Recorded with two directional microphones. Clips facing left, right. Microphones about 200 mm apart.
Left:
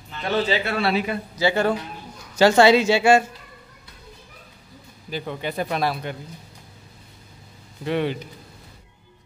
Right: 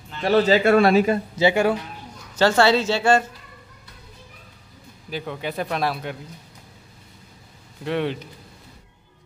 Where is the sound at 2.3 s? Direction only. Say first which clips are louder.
Left 3 dB; 15° left (ahead or behind).